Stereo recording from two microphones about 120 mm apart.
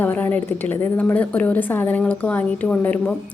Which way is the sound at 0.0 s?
15° left (ahead or behind).